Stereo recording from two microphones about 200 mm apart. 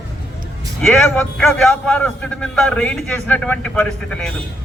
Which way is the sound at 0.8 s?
Centre (ahead or behind).